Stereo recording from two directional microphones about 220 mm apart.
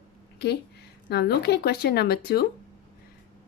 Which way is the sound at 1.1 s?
50° left (ahead or behind).